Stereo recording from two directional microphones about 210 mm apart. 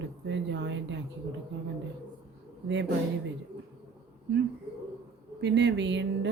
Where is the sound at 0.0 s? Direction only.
60° right (ahead or behind).